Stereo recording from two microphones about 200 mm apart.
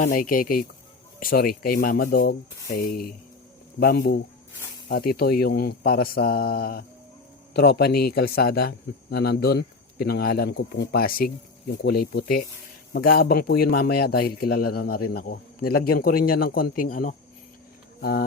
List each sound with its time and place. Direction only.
0.0 s speech: 45° left (ahead or behind)